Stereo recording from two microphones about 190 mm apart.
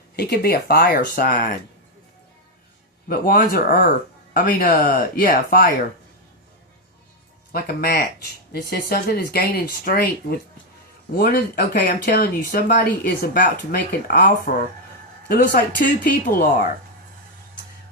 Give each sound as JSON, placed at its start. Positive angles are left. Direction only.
{"t": 0.2, "sound": "speech", "side_deg": 55}
{"t": 3.1, "sound": "speech", "side_deg": 50}
{"t": 7.5, "sound": "speech", "side_deg": 55}